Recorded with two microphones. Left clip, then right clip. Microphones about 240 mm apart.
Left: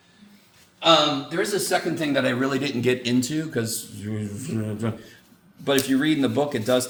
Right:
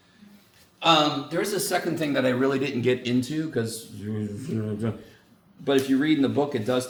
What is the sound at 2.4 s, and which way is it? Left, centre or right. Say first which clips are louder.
Speech: even; centre.